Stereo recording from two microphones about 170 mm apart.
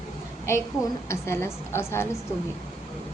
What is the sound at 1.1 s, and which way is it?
A woman's voice, 15° left (ahead or behind).